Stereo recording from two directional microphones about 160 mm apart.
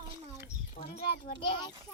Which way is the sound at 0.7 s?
60° left (ahead or behind).